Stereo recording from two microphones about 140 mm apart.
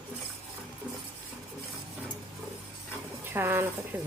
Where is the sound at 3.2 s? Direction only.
15° right (ahead or behind).